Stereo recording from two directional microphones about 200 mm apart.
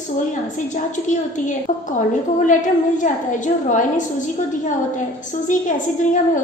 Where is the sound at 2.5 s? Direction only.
40° left (ahead or behind).